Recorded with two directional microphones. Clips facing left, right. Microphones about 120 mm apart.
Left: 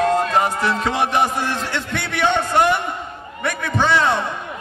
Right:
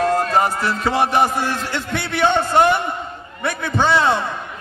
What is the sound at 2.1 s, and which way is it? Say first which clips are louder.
A man's voice: right 2 dB; 30° right (ahead or behind).